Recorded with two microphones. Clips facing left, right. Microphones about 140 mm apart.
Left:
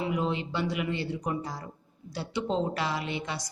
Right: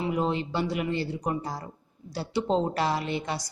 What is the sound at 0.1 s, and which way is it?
A woman's voice, 40° right (ahead or behind).